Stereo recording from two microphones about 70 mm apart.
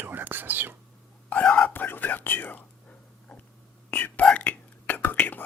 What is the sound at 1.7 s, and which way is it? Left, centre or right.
Whispering, left.